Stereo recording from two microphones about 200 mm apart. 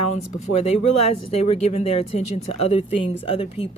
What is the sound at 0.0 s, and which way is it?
Speech, 35° left (ahead or behind).